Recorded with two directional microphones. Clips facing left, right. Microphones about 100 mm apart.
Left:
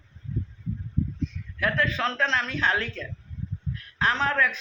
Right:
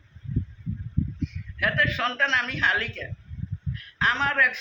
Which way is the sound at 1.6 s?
30° left (ahead or behind).